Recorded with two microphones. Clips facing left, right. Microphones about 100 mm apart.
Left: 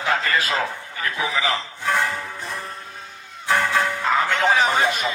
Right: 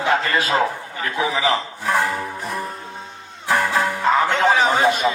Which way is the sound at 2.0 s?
30° right (ahead or behind).